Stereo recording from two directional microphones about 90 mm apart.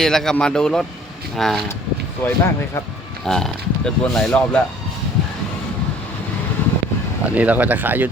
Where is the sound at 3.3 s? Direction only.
5° left (ahead or behind).